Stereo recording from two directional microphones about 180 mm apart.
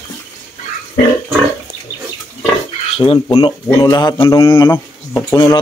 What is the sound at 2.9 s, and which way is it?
Speech, 30° left (ahead or behind).